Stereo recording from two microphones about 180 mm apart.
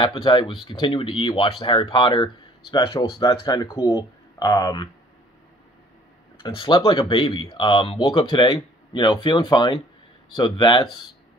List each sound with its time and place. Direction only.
0.0 s speech: 30° left (ahead or behind)
6.4 s speech: 30° left (ahead or behind)